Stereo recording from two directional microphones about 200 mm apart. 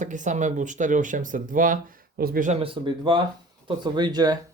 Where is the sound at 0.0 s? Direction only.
40° right (ahead or behind).